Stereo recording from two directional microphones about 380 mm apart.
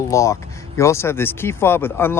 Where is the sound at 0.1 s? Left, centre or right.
Centre.